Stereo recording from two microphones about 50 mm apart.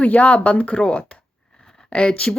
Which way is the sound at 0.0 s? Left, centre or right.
Left.